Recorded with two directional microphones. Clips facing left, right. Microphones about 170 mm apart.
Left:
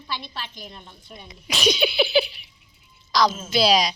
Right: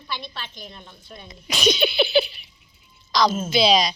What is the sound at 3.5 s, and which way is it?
Speech, 5° left (ahead or behind).